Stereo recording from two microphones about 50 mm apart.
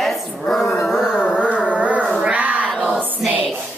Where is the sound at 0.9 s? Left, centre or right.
Centre.